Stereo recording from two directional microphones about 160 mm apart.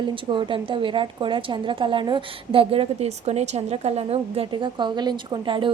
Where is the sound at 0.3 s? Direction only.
30° right (ahead or behind).